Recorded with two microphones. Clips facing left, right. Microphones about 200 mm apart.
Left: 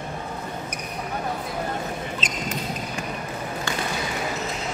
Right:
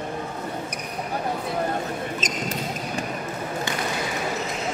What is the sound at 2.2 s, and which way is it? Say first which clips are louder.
Basketball bounce: right 3 dB; 45° right (ahead or behind).